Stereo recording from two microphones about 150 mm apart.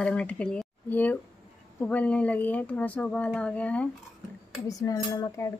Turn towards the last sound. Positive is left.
turn(degrees=20)  # may be behind; listen again after turning